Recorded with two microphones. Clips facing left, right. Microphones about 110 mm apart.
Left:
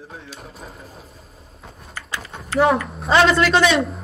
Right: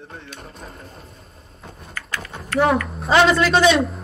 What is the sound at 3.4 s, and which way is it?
Speech, 30° right (ahead or behind).